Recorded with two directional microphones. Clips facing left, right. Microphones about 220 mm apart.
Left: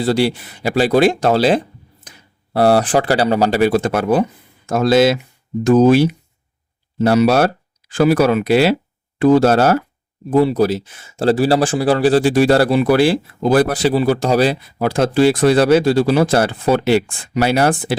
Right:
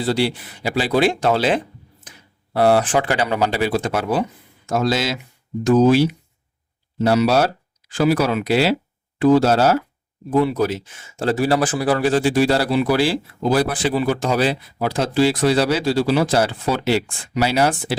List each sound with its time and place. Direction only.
0.0 s speech: 45° left (ahead or behind)
10.3 s speech: 35° left (ahead or behind); by 13.7 s 55° left (ahead or behind)
13.8 s speech: 35° left (ahead or behind); by 17.9 s 55° left (ahead or behind)